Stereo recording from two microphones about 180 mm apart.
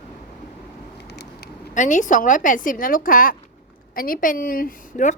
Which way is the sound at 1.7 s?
45° left (ahead or behind).